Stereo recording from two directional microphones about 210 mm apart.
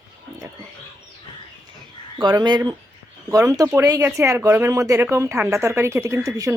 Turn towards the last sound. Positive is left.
turn(degrees=-15)  # may be behind; listen again after turning